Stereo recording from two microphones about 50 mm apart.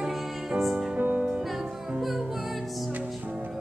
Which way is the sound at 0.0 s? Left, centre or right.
Centre.